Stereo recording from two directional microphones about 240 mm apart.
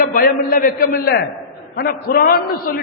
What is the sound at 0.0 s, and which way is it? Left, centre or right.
A man's voice, left.